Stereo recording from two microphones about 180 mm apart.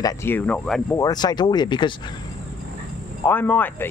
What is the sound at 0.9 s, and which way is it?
Speech, 20° left (ahead or behind).